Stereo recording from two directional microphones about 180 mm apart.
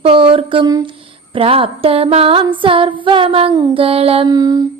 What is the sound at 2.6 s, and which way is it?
Music, 30° right (ahead or behind).